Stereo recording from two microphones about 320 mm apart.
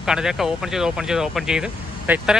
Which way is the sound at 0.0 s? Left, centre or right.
Centre.